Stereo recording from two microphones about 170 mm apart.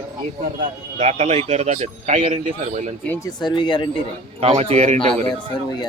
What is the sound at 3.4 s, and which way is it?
Speech, 25° left (ahead or behind).